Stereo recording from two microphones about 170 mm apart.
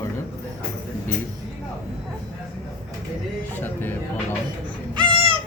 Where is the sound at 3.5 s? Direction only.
10° left (ahead or behind).